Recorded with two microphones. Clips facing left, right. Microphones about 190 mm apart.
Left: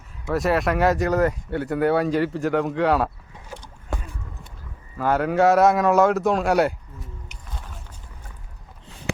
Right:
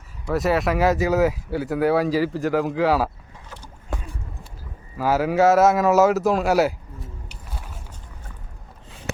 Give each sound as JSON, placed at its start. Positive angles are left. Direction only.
{"t": 0.3, "sound": "speech", "side_deg": 0}
{"t": 3.5, "sound": "a sound", "side_deg": 30}
{"t": 4.9, "sound": "speech", "side_deg": -5}